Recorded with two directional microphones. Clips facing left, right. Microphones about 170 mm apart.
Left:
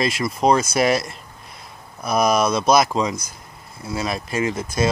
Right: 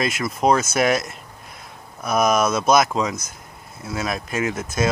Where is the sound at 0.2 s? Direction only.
5° right (ahead or behind).